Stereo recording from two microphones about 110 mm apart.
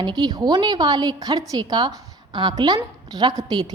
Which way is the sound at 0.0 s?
40° right (ahead or behind).